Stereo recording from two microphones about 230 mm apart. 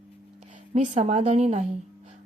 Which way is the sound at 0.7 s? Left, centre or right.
Right.